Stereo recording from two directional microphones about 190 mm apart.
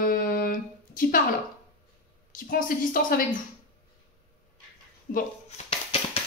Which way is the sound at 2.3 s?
45° left (ahead or behind).